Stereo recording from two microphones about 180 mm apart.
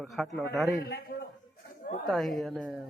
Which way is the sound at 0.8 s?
65° left (ahead or behind).